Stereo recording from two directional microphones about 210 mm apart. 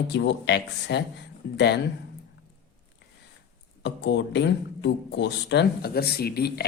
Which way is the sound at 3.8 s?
55° left (ahead or behind).